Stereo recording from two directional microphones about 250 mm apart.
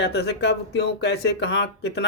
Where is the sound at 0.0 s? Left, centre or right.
Left.